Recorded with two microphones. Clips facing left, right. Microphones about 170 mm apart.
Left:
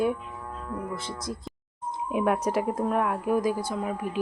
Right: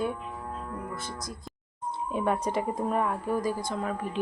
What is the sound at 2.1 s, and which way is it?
Speech, 10° left (ahead or behind).